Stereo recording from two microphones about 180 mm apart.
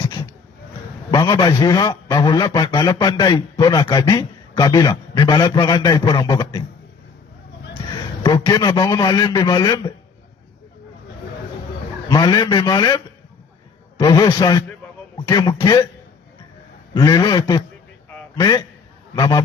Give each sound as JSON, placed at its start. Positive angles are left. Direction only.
{"t": 1.1, "sound": "a man's voice", "side_deg": 25}
{"t": 8.2, "sound": "a man's voice", "side_deg": 25}
{"t": 12.0, "sound": "a man's voice", "side_deg": 25}
{"t": 14.0, "sound": "a man's voice", "side_deg": 20}
{"t": 16.9, "sound": "a man's voice", "side_deg": 25}